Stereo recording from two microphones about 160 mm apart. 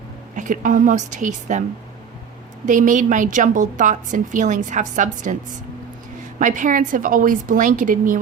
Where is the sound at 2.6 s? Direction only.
50° right (ahead or behind).